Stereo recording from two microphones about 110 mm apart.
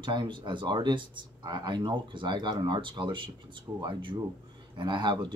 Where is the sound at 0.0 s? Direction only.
45° right (ahead or behind).